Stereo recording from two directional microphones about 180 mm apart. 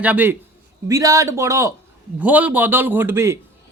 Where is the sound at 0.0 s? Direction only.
10° right (ahead or behind).